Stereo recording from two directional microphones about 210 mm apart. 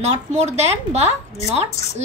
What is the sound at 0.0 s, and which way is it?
A woman's voice, 30° right (ahead or behind).